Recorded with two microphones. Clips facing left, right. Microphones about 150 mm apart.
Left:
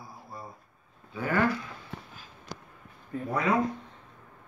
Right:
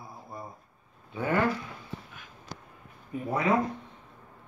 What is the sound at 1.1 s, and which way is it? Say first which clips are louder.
Speech: right 2 dB; 25° right (ahead or behind).